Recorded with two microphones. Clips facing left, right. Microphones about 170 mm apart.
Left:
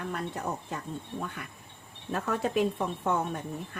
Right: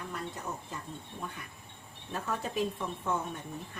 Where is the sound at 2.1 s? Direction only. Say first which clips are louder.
Left 6 dB; 70° left (ahead or behind).